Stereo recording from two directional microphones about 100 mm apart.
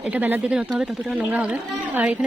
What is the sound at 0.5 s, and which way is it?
Speech, 5° right (ahead or behind).